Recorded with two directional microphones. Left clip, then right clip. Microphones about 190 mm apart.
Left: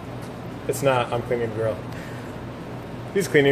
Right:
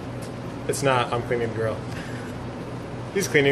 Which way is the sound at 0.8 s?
10° left (ahead or behind).